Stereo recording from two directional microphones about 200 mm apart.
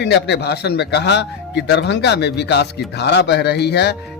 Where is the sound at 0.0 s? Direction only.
55° left (ahead or behind).